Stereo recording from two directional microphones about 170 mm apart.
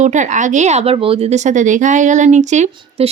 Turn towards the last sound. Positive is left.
turn(degrees=-45)  # may be behind; listen again after turning